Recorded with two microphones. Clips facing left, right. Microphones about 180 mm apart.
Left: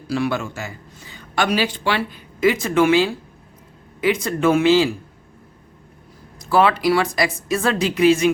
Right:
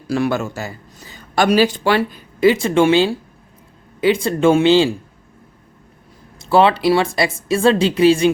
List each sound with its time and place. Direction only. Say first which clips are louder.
0.1 s a man's voice: right 3 dB; 45° right (ahead or behind); by 4.9 s 30° right (ahead or behind)
6.4 s a woman's voice: right 3 dB; 25° right (ahead or behind)